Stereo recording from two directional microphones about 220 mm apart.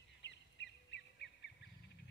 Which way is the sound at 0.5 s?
50° left (ahead or behind).